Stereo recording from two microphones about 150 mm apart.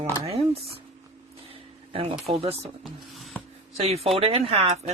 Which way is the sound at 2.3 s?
40° right (ahead or behind).